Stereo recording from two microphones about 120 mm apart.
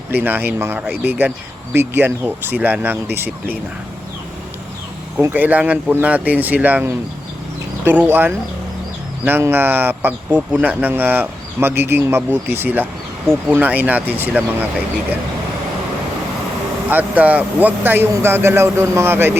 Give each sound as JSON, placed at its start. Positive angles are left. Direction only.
{"t": 0.1, "sound": "speech", "side_deg": -15}
{"t": 5.3, "sound": "speech", "side_deg": -15}
{"t": 16.9, "sound": "speech", "side_deg": -15}